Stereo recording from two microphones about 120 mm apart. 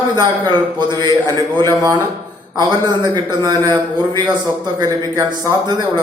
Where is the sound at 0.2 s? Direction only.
35° right (ahead or behind).